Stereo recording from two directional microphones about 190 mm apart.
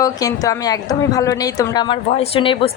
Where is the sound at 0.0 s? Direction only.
20° left (ahead or behind).